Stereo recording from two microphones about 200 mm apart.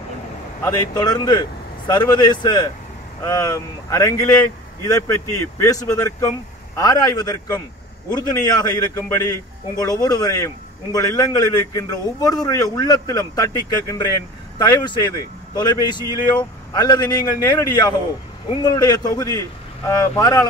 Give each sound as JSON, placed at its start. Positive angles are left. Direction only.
{"t": 0.6, "sound": "a man's voice", "side_deg": 15}